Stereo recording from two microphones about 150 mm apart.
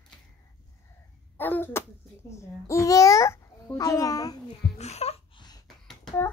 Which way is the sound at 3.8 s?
25° left (ahead or behind).